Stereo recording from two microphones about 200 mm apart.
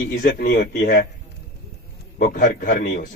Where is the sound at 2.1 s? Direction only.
45° left (ahead or behind).